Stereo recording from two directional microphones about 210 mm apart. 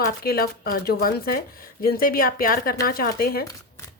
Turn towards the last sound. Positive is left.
turn(degrees=45)  # may be behind; listen again after turning